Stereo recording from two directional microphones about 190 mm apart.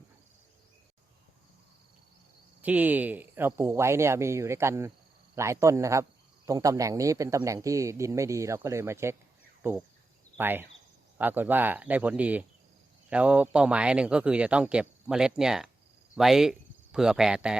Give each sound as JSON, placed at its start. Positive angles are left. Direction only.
{"t": 2.6, "sound": "speech", "side_deg": -10}